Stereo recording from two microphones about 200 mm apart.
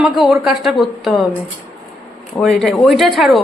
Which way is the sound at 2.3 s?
Centre (ahead or behind).